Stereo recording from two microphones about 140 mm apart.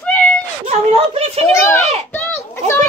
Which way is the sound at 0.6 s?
45° right (ahead or behind).